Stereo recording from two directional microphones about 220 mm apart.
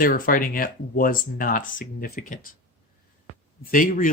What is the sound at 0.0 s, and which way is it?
Speech, 40° left (ahead or behind).